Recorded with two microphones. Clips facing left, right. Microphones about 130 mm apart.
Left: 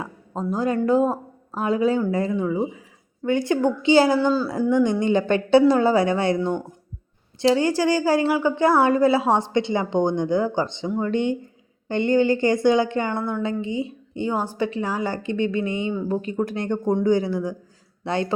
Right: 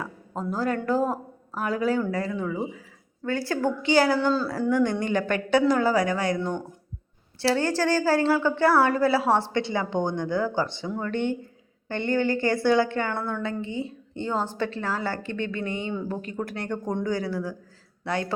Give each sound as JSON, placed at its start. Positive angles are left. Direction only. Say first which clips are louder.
{"t": 0.0, "sound": "a woman's voice", "louder": "left 3 dB", "side_deg": 20}